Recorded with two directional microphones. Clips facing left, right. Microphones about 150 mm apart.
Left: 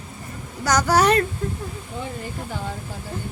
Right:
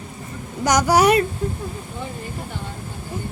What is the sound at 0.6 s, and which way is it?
Speech, 15° right (ahead or behind).